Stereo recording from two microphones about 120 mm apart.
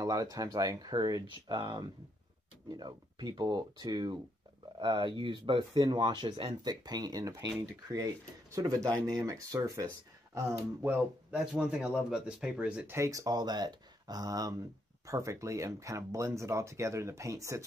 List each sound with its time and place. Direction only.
0.0 s speech: 30° right (ahead or behind)
11.3 s speech: 10° right (ahead or behind)
12.9 s speech: 25° right (ahead or behind)